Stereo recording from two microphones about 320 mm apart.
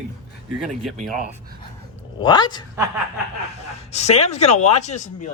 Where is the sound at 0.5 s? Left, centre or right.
Centre.